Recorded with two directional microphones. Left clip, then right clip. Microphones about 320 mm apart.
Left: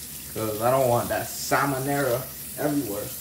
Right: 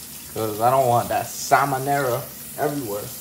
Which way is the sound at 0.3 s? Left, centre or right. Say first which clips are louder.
Right 4 dB; centre.